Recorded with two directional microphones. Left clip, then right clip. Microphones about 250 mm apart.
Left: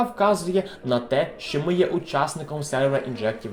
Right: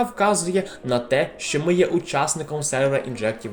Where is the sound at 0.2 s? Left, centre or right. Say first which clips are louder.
Even; right.